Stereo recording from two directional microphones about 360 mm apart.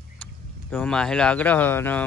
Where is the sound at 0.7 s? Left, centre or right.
Centre.